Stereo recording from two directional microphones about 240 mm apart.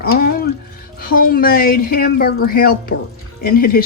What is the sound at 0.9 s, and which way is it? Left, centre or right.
Speech, left.